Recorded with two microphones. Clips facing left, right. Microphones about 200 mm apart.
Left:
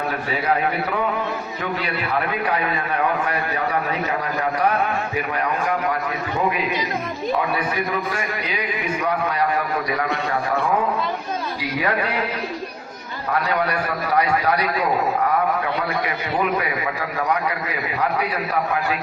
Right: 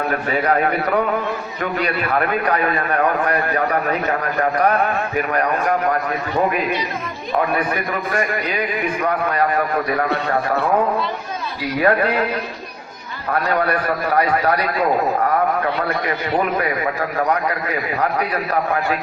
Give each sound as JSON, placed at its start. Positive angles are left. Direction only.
{"t": 0.1, "sound": "a man's voice", "side_deg": -50}
{"t": 11.8, "sound": "a man's voice", "side_deg": -50}
{"t": 13.4, "sound": "a man's voice", "side_deg": -55}
{"t": 16.6, "sound": "a man's voice", "side_deg": -45}